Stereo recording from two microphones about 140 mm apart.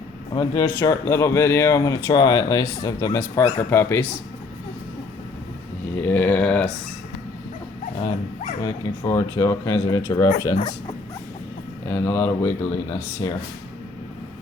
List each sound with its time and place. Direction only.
0.3 s speech: 20° left (ahead or behind)
6.0 s speech: 10° left (ahead or behind)
8.6 s speech: 25° left (ahead or behind)
11.9 s speech: 10° left (ahead or behind)